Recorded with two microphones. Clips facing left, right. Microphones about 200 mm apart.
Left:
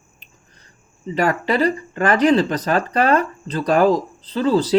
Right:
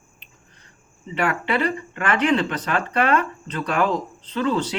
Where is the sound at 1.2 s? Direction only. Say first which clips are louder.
Left 4 dB; 40° left (ahead or behind).